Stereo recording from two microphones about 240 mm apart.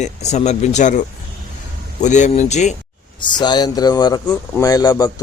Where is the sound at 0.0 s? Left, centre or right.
Left.